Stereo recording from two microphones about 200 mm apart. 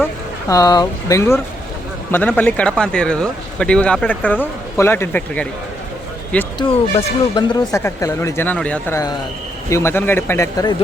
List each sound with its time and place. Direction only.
0.0 s speech: 15° left (ahead or behind)
6.6 s speech: 25° left (ahead or behind)